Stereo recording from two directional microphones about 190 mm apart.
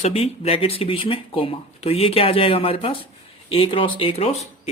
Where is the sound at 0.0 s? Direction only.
35° left (ahead or behind).